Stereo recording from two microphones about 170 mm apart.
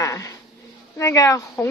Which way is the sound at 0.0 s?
20° left (ahead or behind).